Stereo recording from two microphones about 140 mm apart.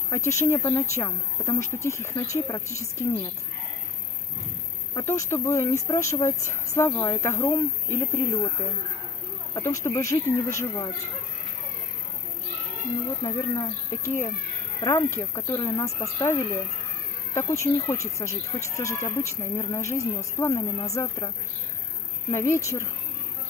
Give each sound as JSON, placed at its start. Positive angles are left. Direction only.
{"t": 0.1, "sound": "speech", "side_deg": 20}
{"t": 4.9, "sound": "speech", "side_deg": 20}
{"t": 13.2, "sound": "speech", "side_deg": 30}
{"t": 22.3, "sound": "speech", "side_deg": 20}